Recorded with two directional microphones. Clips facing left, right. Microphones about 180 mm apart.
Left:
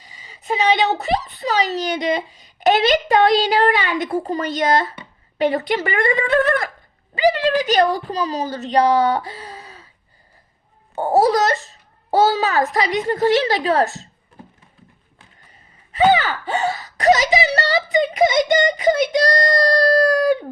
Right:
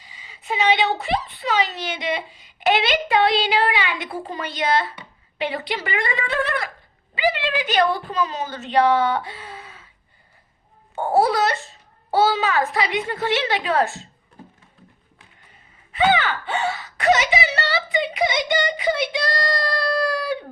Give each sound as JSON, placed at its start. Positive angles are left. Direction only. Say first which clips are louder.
{"t": 0.0, "sound": "a woman's voice", "louder": "left 2 dB", "side_deg": 40}
{"t": 10.9, "sound": "speech", "louder": "left 3 dB", "side_deg": 40}
{"t": 15.9, "sound": "a sound", "louder": "left 4 dB", "side_deg": 40}